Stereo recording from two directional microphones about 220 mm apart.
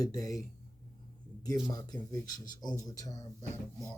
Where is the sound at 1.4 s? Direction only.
15° left (ahead or behind).